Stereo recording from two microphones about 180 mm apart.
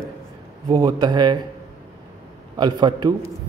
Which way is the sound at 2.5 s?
25° right (ahead or behind).